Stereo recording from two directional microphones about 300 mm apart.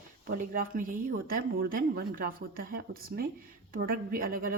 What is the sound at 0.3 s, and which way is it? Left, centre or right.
A woman's voice, right.